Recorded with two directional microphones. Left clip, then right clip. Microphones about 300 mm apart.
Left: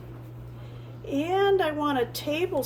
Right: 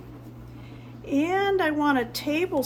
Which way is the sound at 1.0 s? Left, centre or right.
Centre.